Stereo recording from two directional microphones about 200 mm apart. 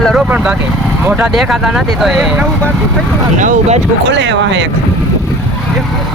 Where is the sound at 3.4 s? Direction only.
35° right (ahead or behind).